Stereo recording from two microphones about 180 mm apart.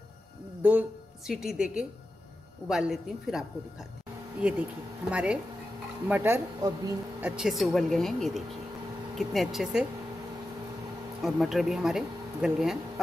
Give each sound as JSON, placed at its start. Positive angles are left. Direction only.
{"t": 0.6, "sound": "a woman's voice", "side_deg": -10}
{"t": 7.2, "sound": "speech", "side_deg": -5}
{"t": 11.2, "sound": "speech", "side_deg": 0}